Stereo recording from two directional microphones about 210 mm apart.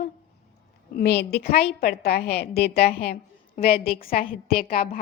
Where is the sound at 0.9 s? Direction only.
55° left (ahead or behind).